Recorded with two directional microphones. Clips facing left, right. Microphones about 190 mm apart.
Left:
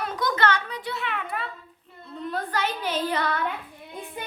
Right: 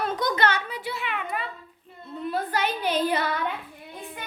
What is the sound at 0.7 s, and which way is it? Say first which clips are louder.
A woman's voice: even; 5° right (ahead or behind).